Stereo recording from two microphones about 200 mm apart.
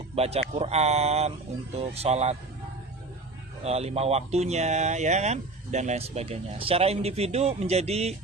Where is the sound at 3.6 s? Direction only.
30° right (ahead or behind).